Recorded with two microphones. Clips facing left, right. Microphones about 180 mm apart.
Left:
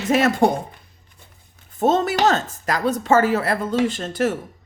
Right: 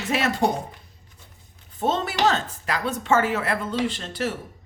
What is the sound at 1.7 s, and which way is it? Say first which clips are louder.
Speech: left 6 dB; 45° left (ahead or behind).